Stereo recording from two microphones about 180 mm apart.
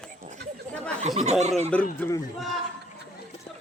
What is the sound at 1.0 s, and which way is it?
Speech, 40° right (ahead or behind).